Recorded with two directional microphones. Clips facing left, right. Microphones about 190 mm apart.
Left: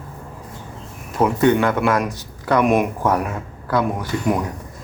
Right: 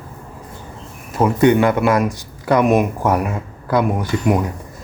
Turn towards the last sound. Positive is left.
turn(degrees=-15)  # may be behind; listen again after turning